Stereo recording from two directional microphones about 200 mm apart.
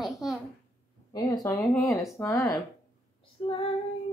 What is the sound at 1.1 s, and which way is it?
Speech, 20° left (ahead or behind).